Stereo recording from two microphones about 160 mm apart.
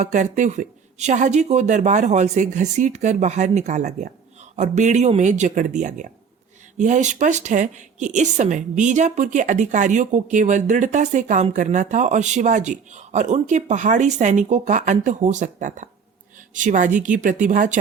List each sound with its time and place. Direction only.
0.0 s a woman's voice: 50° right (ahead or behind)